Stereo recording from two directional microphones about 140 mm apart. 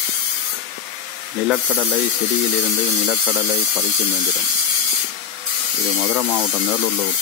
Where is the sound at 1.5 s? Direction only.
5° right (ahead or behind).